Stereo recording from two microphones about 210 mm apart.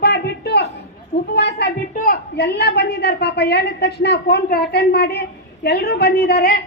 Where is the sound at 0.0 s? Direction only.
50° left (ahead or behind).